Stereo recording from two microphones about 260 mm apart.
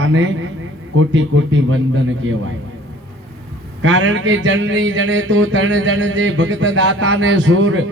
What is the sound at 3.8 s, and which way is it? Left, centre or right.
Speech, right.